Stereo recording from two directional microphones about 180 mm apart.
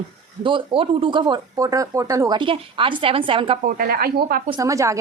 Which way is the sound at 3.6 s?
55° right (ahead or behind).